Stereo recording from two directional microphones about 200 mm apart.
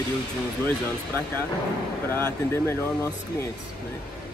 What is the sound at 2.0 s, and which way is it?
Speech, 15° left (ahead or behind).